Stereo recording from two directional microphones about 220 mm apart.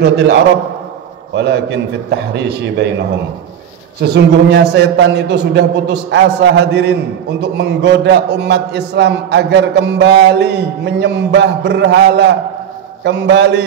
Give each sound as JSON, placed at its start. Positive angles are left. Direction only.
{"t": 0.0, "sound": "a man's voice", "side_deg": -50}
{"t": 4.1, "sound": "a man's voice", "side_deg": -50}